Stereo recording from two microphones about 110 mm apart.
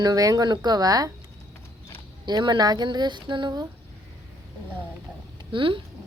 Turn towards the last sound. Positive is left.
turn(degrees=-50)  # may be behind; listen again after turning